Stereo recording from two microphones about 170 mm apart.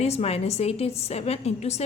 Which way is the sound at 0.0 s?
35° left (ahead or behind).